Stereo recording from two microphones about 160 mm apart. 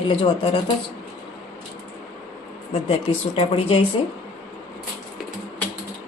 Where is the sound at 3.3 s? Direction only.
35° left (ahead or behind).